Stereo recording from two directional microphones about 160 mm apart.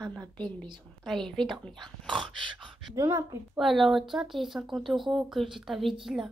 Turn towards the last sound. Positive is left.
turn(degrees=0)  # may be behind; listen again after turning